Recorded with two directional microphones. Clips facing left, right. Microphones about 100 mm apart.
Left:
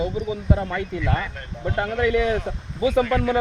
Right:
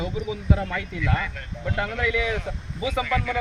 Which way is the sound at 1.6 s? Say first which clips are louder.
Left 4 dB; 30° left (ahead or behind).